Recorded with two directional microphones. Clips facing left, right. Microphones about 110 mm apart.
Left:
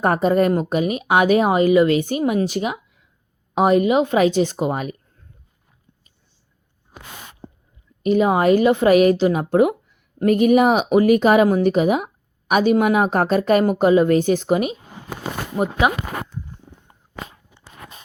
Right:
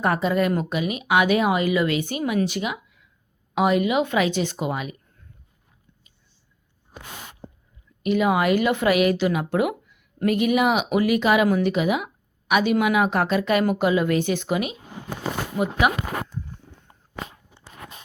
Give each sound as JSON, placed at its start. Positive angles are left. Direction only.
{"t": 0.0, "sound": "speech", "side_deg": 40}
{"t": 8.0, "sound": "speech", "side_deg": 35}